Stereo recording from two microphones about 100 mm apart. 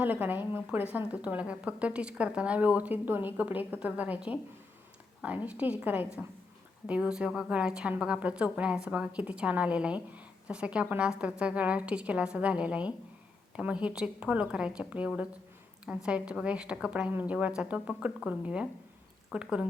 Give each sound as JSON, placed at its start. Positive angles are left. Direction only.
{"t": 0.0, "sound": "a woman's voice", "side_deg": -20}